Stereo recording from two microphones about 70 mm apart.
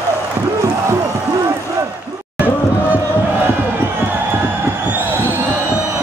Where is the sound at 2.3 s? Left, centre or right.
Right.